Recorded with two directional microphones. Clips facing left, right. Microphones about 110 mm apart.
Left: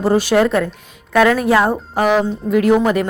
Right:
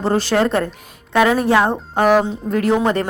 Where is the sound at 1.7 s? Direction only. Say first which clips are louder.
Right 1 dB; 5° left (ahead or behind).